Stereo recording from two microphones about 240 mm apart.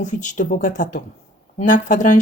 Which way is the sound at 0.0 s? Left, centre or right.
Left.